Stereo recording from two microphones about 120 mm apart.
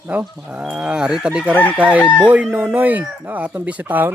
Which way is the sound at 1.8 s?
10° right (ahead or behind).